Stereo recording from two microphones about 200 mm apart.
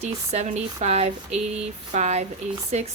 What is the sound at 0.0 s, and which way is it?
Speech, 35° right (ahead or behind).